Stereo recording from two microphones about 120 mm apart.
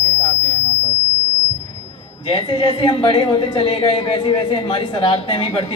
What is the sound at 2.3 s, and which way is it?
A woman's voice, 45° left (ahead or behind).